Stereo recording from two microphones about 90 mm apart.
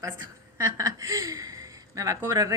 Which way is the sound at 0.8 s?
40° right (ahead or behind).